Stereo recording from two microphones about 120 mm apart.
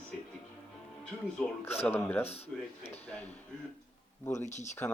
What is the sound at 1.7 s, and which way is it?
Speech, 60° left (ahead or behind).